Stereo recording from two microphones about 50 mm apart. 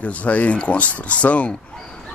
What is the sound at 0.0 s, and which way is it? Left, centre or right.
Speech, left.